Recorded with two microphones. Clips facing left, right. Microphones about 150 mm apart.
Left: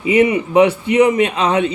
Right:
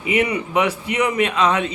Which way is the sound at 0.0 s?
25° left (ahead or behind).